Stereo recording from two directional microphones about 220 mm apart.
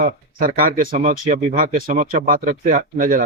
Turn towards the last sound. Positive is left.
turn(degrees=-35)  # may be behind; listen again after turning